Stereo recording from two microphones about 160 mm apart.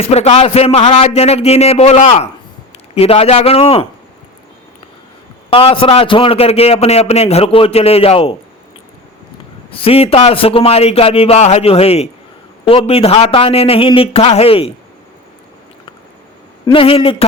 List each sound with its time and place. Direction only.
0.1 s a man's voice: 40° left (ahead or behind)
5.5 s a man's voice: 35° left (ahead or behind)
9.7 s a man's voice: 35° left (ahead or behind)
16.7 s a man's voice: 35° left (ahead or behind)